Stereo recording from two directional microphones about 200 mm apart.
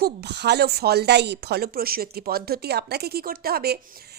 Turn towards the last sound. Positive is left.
turn(degrees=-50)  # may be behind; listen again after turning